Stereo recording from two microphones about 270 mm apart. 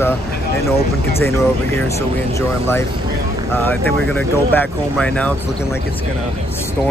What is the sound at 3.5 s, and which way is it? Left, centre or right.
Speech, centre.